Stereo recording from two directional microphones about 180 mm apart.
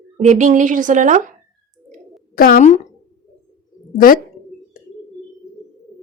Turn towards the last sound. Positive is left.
turn(degrees=50)  # may be behind; listen again after turning